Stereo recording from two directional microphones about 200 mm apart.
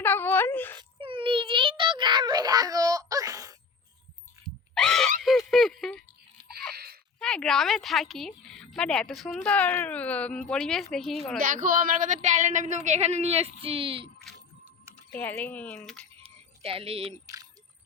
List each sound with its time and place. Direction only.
0.0 s wail: 10° left (ahead or behind)
0.8 s a sound: 25° right (ahead or behind)
4.7 s a sound: centre (ahead or behind)
7.2 s a woman's voice: 5° left (ahead or behind)
11.3 s speech: 45° right (ahead or behind); by 14.1 s 25° right (ahead or behind)
15.1 s speech: 10° left (ahead or behind)
16.6 s speech: 30° right (ahead or behind)